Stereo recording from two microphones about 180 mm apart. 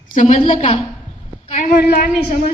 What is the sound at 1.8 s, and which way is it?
Speech, 60° left (ahead or behind).